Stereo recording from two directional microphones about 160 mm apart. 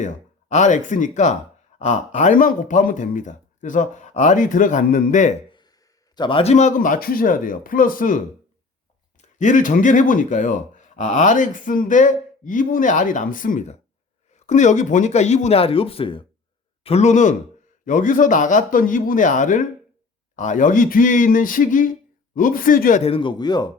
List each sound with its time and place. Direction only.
0.0 s speech: 50° left (ahead or behind)
5.5 s a sound: 30° left (ahead or behind)
6.1 s a man's voice: 30° left (ahead or behind); by 23.0 s 55° left (ahead or behind)
23.0 s a man's voice: 35° left (ahead or behind)